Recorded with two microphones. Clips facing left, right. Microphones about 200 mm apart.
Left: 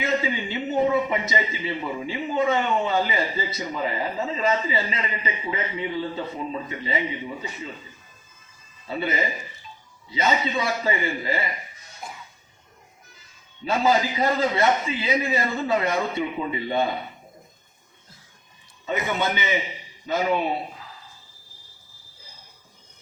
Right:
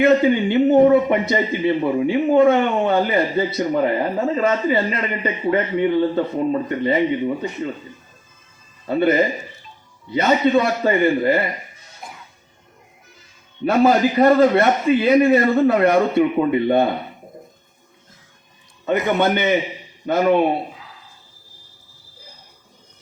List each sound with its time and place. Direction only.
0.0 s a man's voice: 60° right (ahead or behind)
8.9 s a man's voice: 60° right (ahead or behind)
13.7 s a man's voice: 60° right (ahead or behind)
18.9 s a man's voice: 60° right (ahead or behind)
20.7 s a sound: centre (ahead or behind)